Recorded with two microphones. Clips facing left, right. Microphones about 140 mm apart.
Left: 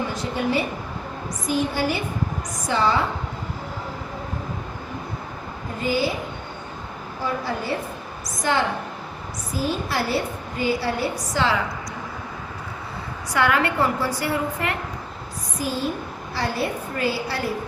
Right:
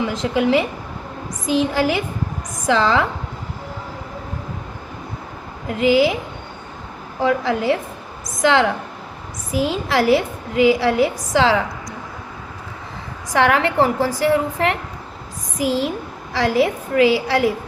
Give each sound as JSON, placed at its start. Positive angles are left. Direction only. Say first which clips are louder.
{"t": 0.0, "sound": "a woman's voice", "louder": "right 6 dB", "side_deg": -90}
{"t": 5.6, "sound": "a woman's voice", "louder": "right 8 dB", "side_deg": -90}
{"t": 7.2, "sound": "a woman's voice", "louder": "right 8 dB", "side_deg": -90}
{"t": 13.3, "sound": "a woman's voice", "louder": "right 5 dB", "side_deg": -90}